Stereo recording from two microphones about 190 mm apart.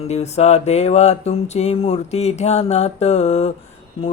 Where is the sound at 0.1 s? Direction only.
35° left (ahead or behind).